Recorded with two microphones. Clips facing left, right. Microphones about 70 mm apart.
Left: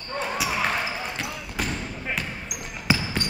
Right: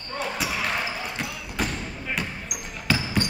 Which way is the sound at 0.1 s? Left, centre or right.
Centre.